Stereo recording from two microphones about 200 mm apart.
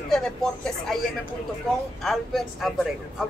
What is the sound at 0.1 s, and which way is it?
Speech, centre (ahead or behind).